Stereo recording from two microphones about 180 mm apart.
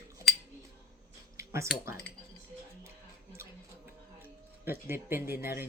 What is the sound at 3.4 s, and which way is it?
Music, 10° right (ahead or behind).